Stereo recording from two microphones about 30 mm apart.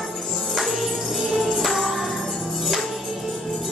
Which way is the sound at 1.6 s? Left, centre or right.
Centre.